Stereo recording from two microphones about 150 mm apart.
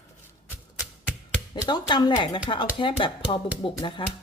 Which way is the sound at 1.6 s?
30° left (ahead or behind).